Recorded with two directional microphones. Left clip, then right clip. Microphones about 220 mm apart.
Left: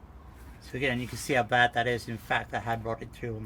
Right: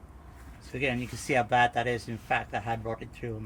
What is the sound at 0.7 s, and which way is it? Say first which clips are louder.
Speech: even; 15° left (ahead or behind).